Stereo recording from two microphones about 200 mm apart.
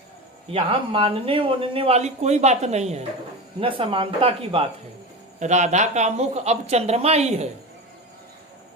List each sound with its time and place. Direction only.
0.5 s speech: 30° right (ahead or behind)